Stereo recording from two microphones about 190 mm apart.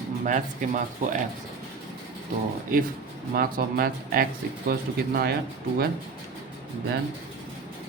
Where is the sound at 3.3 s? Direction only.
50° right (ahead or behind).